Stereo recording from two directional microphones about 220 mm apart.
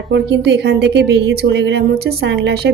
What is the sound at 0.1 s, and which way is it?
A woman's voice, 50° right (ahead or behind).